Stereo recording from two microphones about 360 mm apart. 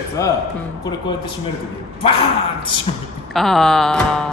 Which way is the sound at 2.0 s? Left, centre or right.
Centre.